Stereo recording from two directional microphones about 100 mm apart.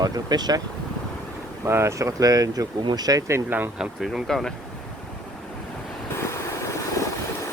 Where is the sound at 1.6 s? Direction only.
25° right (ahead or behind).